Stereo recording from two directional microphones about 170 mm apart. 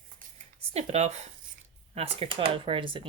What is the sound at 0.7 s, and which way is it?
Speech, 40° right (ahead or behind).